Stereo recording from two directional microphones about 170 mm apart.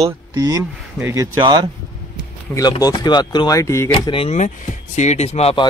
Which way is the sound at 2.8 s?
25° left (ahead or behind).